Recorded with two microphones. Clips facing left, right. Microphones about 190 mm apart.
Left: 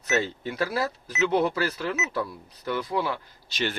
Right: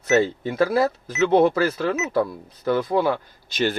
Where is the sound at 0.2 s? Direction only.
50° right (ahead or behind).